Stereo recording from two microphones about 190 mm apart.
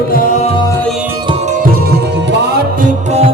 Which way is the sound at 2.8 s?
35° right (ahead or behind).